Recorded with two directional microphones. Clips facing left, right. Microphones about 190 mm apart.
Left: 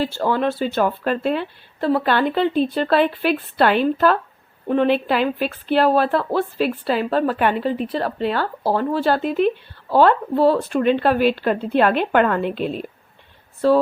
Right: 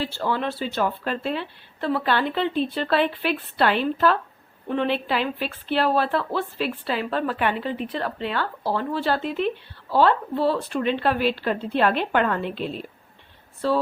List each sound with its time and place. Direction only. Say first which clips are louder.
0.0 s a woman's voice: left 6 dB; 45° left (ahead or behind)